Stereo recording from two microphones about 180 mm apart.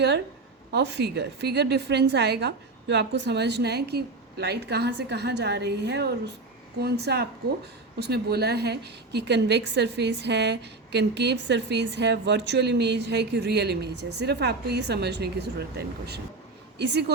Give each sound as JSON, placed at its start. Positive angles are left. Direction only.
{"t": 0.7, "sound": "a woman's voice", "side_deg": -70}